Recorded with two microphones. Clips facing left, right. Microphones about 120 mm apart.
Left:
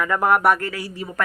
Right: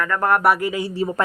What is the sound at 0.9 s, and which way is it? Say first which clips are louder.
Speech: right 9 dB; 30° right (ahead or behind).